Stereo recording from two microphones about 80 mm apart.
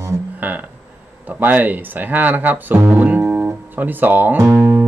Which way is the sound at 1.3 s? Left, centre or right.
Right.